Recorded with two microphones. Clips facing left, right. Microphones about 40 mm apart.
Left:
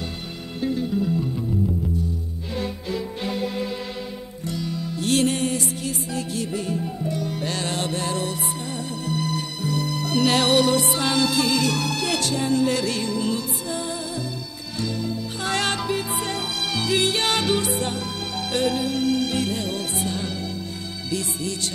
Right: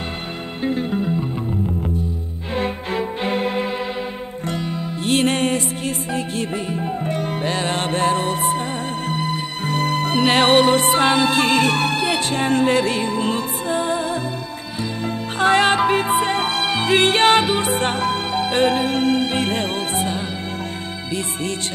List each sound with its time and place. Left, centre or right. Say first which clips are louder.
0.6 s music: right 2 dB; right
2.5 s music: right 6 dB; right
5.2 s music: right 4 dB; right
7.4 s music: right 6 dB; right
9.7 s music: right 6 dB; right
12.4 s music: right 5 dB; right
15.5 s music: right 8 dB; right
15.9 s music: right 8 dB; right